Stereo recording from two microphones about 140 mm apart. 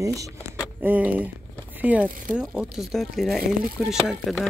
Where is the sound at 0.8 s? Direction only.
10° right (ahead or behind).